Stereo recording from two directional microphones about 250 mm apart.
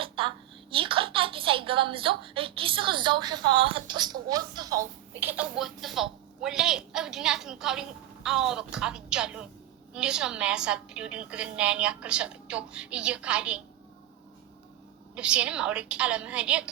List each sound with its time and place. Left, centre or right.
0.0 s a child's voice: right; by 13.6 s centre
15.1 s a woman's voice: centre